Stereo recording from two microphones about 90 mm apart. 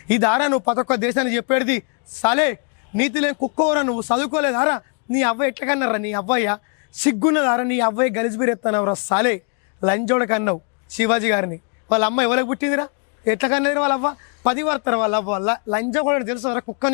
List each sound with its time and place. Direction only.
0.1 s a man's voice: 15° left (ahead or behind)